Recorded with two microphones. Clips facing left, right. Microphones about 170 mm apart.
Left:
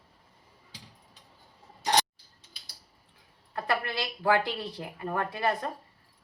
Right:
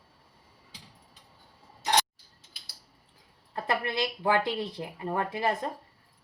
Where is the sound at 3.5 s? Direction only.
25° right (ahead or behind).